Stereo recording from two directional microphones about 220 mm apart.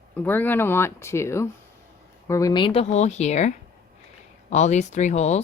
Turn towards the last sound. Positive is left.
turn(degrees=30)  # may be behind; listen again after turning